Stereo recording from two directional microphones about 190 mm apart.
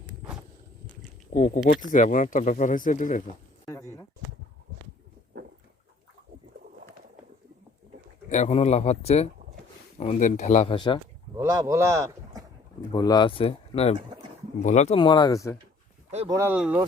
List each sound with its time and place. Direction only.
1.3 s speech: 40° left (ahead or behind)
3.7 s a sound: 15° left (ahead or behind)
8.3 s speech: 35° left (ahead or behind)
10.8 s speech: 25° left (ahead or behind)
11.3 s speech: 20° right (ahead or behind)
12.9 s speech: 20° left (ahead or behind)
16.3 s speech: 10° right (ahead or behind)